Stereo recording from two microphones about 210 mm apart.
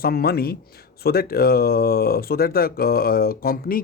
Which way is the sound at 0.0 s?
45° left (ahead or behind).